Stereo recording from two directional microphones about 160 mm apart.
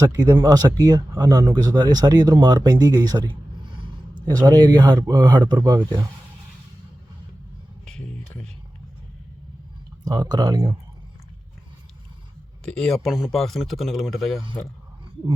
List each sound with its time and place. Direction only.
0.0 s speech: 20° right (ahead or behind)
7.9 s a sound: 5° left (ahead or behind)
10.0 s speech: 25° right (ahead or behind)
12.6 s speech: 5° left (ahead or behind)